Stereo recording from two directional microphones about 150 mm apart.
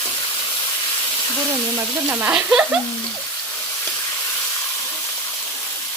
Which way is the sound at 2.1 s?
10° right (ahead or behind).